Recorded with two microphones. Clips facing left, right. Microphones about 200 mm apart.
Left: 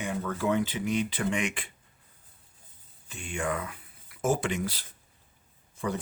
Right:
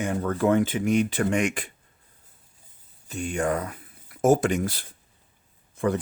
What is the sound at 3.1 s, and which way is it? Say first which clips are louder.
Speech: right 6 dB; 40° right (ahead or behind).